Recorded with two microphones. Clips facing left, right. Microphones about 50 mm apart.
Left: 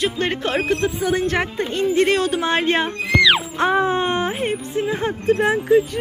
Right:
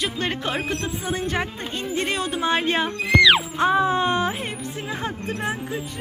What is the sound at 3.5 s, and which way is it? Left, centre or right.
Speech, left.